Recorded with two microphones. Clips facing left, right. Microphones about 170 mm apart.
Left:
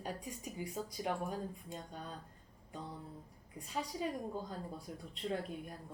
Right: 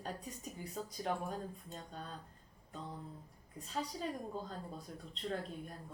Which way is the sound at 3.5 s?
10° left (ahead or behind).